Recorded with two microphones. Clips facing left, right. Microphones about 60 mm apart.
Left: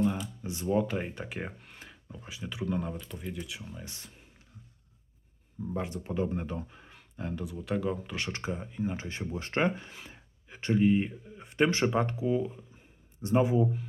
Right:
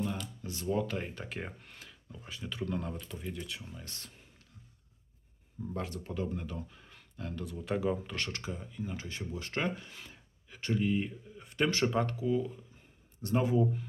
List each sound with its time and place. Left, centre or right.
0.0 s speech: centre
1.8 s a sound: left
2.2 s speech: centre
5.7 s speech: centre
7.4 s speech: centre
8.3 s speech: left